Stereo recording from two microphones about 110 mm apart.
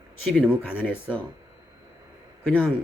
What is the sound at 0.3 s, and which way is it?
Speech, 15° left (ahead or behind).